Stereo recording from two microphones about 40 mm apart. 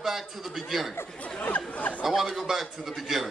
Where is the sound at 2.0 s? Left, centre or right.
Centre.